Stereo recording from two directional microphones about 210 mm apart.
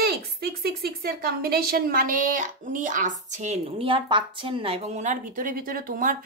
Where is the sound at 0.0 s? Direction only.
50° right (ahead or behind).